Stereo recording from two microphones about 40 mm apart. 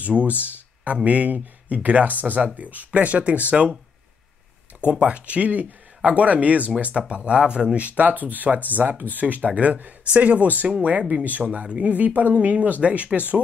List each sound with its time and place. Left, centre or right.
0.0 s speech: right
4.7 s speech: right
6.9 s speech: right
7.7 s speech: right
11.6 s speech: right